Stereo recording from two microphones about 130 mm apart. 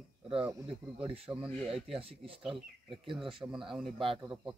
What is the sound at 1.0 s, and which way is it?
Speech, 50° right (ahead or behind).